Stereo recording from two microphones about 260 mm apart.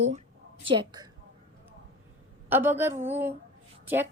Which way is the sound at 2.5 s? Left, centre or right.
Centre.